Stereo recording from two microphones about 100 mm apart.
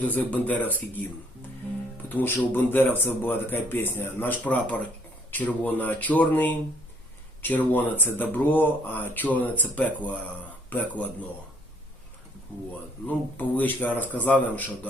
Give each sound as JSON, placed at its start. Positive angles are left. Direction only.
{"t": 0.0, "sound": "speech", "side_deg": 15}
{"t": 2.0, "sound": "speech", "side_deg": 20}
{"t": 13.1, "sound": "speech", "side_deg": 15}